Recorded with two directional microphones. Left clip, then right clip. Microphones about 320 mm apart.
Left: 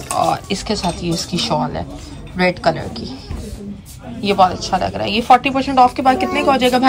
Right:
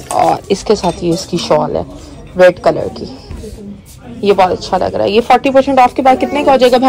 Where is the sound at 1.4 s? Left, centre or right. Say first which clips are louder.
Right 7 dB; centre.